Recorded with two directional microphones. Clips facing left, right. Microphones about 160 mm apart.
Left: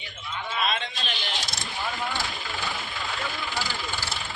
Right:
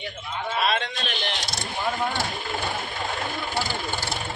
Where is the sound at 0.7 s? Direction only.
60° right (ahead or behind).